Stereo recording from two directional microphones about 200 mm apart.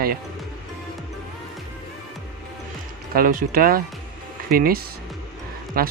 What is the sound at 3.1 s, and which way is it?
Speech, 45° right (ahead or behind).